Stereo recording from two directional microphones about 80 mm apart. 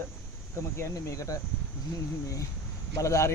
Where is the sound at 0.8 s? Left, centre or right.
Left.